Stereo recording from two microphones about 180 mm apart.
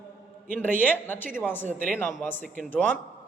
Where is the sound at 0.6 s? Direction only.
10° left (ahead or behind).